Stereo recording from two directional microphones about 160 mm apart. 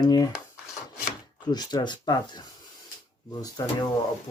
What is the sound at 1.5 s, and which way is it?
Speech, 25° left (ahead or behind).